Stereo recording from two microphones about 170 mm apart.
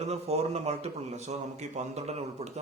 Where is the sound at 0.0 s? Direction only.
40° right (ahead or behind).